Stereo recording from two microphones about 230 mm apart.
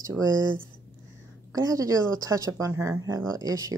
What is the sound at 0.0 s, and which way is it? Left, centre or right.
Speech, centre.